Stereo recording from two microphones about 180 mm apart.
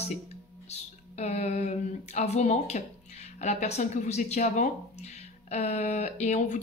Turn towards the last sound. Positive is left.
turn(degrees=40)  # may be behind; listen again after turning